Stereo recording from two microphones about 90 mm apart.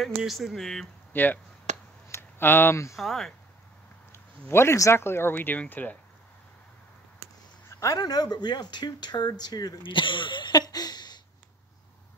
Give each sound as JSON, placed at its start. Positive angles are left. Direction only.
{"t": 0.0, "sound": "speech", "side_deg": 0}
{"t": 1.1, "sound": "speech", "side_deg": 20}
{"t": 2.0, "sound": "a sound", "side_deg": 25}
{"t": 3.0, "sound": "speech", "side_deg": 5}
{"t": 4.1, "sound": "speech", "side_deg": 30}
{"t": 7.8, "sound": "speech", "side_deg": 45}
{"t": 9.8, "sound": "a sound", "side_deg": 65}